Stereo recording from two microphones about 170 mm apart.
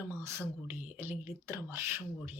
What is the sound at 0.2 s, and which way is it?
Speech, 15° right (ahead or behind).